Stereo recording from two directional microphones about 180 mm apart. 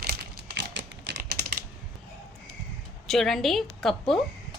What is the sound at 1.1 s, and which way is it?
Typing, 70° right (ahead or behind).